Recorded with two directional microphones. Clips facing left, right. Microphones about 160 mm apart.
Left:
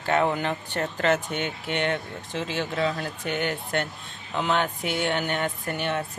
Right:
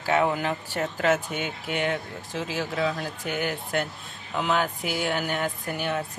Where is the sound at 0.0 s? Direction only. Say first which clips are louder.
Even; 5° right (ahead or behind).